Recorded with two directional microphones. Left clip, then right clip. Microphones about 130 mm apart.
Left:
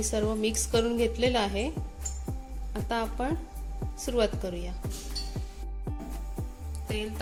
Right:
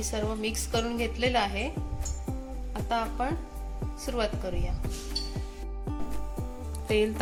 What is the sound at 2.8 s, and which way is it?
Speech, 80° left.